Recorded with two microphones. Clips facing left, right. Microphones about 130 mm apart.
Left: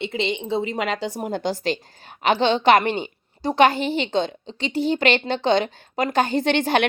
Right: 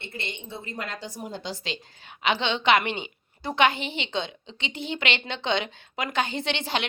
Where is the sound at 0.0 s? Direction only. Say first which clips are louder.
Left 12 dB; 90° left.